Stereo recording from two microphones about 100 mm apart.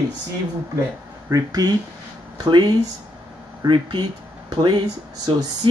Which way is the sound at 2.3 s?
50° right (ahead or behind).